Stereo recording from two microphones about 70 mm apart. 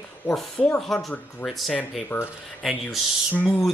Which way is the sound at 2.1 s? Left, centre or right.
Left.